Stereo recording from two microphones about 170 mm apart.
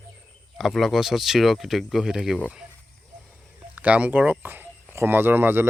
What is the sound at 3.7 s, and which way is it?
Speech, 10° right (ahead or behind).